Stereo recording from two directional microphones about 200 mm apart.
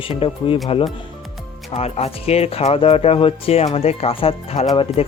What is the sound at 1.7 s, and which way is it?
Speech, 30° left (ahead or behind).